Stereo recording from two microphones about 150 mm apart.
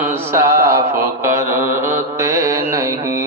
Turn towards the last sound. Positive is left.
turn(degrees=-20)  # may be behind; listen again after turning